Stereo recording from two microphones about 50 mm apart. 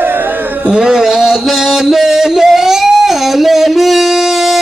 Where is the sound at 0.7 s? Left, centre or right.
Centre.